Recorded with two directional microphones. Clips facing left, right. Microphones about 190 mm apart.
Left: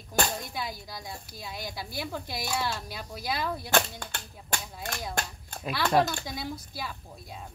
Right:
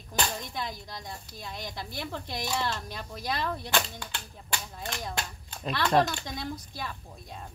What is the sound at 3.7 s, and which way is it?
Speech, 45° left (ahead or behind).